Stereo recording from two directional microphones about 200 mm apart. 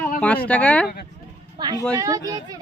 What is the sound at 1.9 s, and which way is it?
Speech, 15° right (ahead or behind).